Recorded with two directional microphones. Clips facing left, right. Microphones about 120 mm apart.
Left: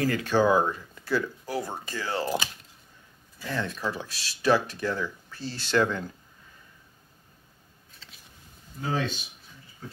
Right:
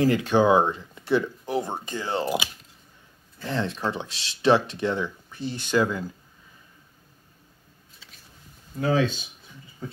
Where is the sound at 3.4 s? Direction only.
25° right (ahead or behind); by 6.0 s 10° right (ahead or behind).